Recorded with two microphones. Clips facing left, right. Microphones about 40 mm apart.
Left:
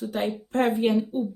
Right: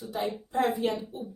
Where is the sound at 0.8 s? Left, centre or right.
Left.